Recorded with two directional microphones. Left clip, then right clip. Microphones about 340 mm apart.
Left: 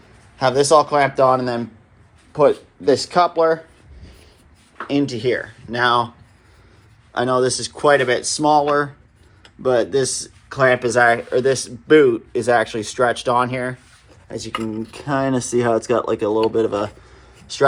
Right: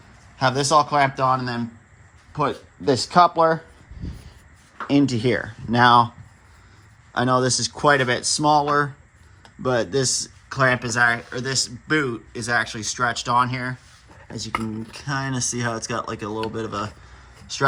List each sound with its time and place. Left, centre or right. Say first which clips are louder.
0.3 s speech: left 4 dB; centre
4.0 s a sound: right 8 dB; centre
4.9 s speech: left 1 dB; right
7.1 s speech: left 2 dB; centre
14.8 s speech: left 7 dB; centre